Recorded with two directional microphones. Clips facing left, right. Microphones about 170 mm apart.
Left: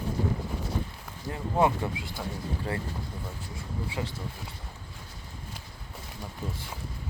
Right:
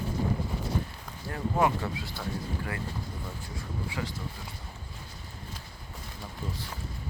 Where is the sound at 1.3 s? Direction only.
20° left (ahead or behind).